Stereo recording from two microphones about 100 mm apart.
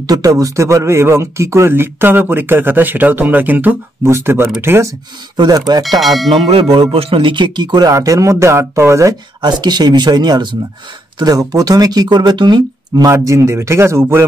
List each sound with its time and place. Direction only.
0.0 s speech: 35° right (ahead or behind)
5.7 s speech: 40° right (ahead or behind)
5.9 s speech: centre (ahead or behind)
6.3 s speech: 65° right (ahead or behind); by 7.9 s 45° right (ahead or behind)
7.9 s speech: 35° right (ahead or behind)
9.4 s speech: 45° right (ahead or behind)
13.1 s speech: 30° right (ahead or behind)